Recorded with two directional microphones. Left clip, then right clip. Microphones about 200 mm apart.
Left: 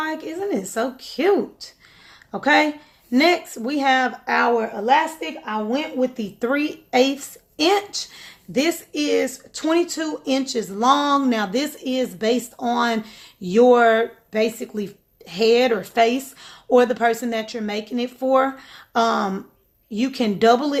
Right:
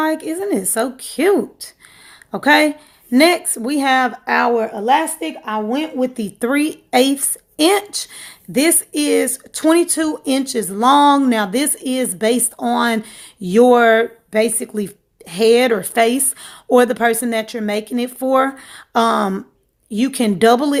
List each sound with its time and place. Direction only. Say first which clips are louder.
0.0 s speech: right 6 dB; 50° right (ahead or behind)